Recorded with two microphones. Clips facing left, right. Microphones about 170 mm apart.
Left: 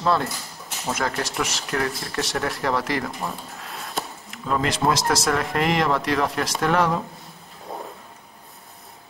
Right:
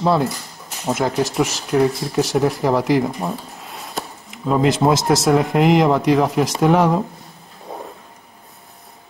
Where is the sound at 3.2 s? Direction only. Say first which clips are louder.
Right 6 dB; 25° right (ahead or behind).